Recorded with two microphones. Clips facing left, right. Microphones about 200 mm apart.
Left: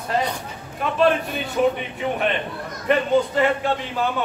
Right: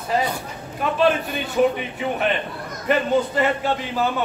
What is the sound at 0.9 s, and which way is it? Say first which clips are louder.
Speech: left 1 dB; centre (ahead or behind).